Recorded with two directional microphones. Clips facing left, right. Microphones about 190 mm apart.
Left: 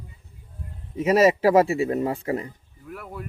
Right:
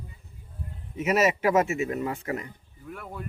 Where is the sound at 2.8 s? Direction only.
Centre (ahead or behind).